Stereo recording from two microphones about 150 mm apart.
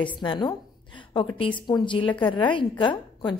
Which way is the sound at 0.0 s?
35° left (ahead or behind).